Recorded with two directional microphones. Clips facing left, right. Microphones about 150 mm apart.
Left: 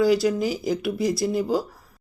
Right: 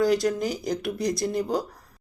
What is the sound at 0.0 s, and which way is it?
Speech, 5° left (ahead or behind).